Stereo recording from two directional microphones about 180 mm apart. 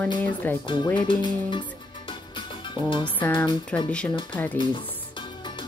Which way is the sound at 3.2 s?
10° left (ahead or behind).